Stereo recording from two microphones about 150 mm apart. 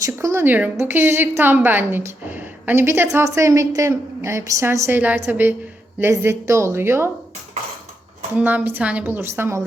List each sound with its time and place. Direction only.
0.0 s a woman's voice: 20° right (ahead or behind)
8.4 s a woman's voice: 10° right (ahead or behind)